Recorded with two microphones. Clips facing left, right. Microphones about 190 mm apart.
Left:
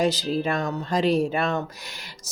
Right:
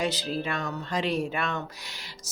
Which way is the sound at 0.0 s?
40° left (ahead or behind).